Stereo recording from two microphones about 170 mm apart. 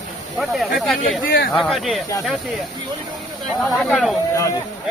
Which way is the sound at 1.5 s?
Centre (ahead or behind).